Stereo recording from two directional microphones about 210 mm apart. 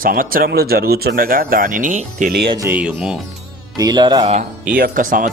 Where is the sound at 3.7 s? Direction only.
20° right (ahead or behind).